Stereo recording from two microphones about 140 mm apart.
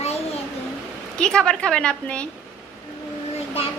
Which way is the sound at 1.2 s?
5° left (ahead or behind).